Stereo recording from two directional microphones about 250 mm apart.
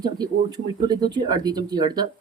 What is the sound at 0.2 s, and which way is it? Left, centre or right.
Speech, centre.